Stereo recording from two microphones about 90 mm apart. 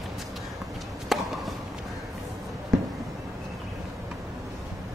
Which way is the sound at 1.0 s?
Centre (ahead or behind).